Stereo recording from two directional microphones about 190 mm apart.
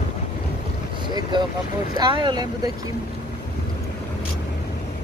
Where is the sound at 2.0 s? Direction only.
25° right (ahead or behind).